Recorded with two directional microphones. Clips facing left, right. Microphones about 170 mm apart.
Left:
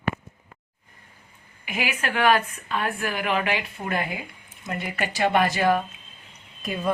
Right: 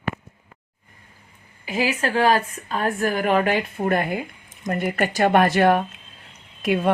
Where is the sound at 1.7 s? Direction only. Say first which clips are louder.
Right 5 dB; 35° right (ahead or behind).